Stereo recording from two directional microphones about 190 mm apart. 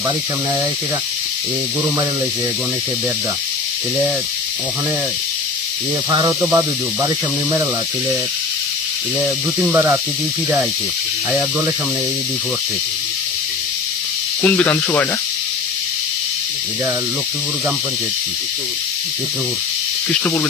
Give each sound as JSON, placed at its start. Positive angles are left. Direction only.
{"t": 6.1, "sound": "speech", "side_deg": -20}
{"t": 9.2, "sound": "speech", "side_deg": -10}
{"t": 14.4, "sound": "speech", "side_deg": 10}